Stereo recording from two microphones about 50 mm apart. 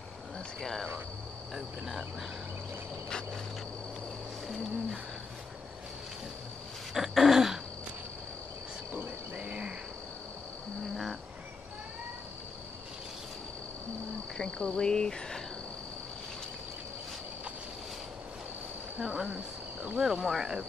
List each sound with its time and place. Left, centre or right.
0.6 s cricket: centre
6.9 s throat clearing: centre
9.4 s cricket: centre
14.3 s cricket: centre
18.9 s cricket: centre
19.2 s cricket: right
20.0 s cricket: centre